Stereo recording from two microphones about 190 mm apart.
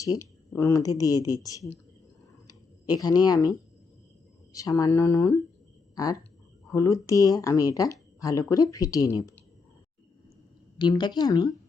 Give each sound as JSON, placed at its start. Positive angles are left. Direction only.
{"t": 0.0, "sound": "speech", "side_deg": 15}
{"t": 4.5, "sound": "speech", "side_deg": 20}
{"t": 10.8, "sound": "speech", "side_deg": 25}